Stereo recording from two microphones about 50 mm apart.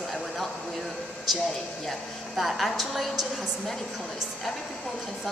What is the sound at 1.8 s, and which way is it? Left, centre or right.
A woman's voice, centre.